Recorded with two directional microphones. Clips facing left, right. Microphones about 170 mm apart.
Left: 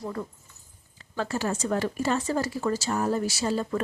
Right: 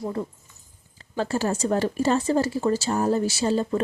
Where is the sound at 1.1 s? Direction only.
30° right (ahead or behind).